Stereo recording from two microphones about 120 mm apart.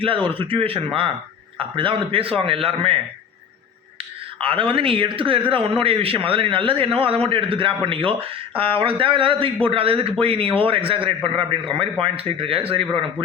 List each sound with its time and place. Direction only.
0.0 s speech: 45° right (ahead or behind)
4.4 s speech: 45° right (ahead or behind)